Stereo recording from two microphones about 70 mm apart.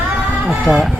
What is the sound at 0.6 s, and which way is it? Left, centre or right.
Speech, centre.